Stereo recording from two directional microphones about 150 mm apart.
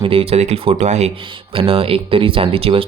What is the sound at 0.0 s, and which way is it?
Speech, 40° right (ahead or behind).